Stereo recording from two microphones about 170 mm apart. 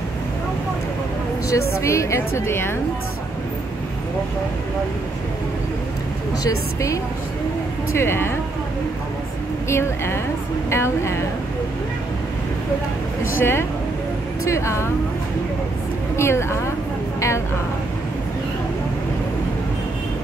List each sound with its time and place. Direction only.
1.5 s a woman's voice: 15° left (ahead or behind)
6.4 s a woman's voice: 20° left (ahead or behind)
9.7 s a woman's voice: 15° left (ahead or behind)
13.4 s a woman's voice: 15° left (ahead or behind)
16.2 s a woman's voice: 15° left (ahead or behind)